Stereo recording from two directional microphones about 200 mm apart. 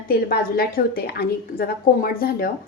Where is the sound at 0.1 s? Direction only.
50° left (ahead or behind).